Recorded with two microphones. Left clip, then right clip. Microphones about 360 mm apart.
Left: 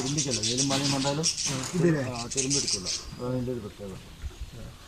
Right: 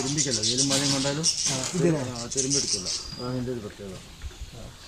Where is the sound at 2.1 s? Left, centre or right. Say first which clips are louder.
Right 2 dB; left.